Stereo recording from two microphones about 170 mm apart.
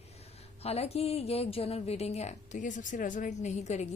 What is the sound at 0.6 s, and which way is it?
A woman's voice, 35° left (ahead or behind).